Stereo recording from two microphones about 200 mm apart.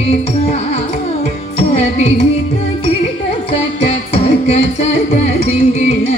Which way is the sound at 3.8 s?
30° left (ahead or behind).